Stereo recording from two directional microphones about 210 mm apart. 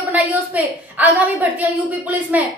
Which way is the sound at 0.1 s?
5° right (ahead or behind).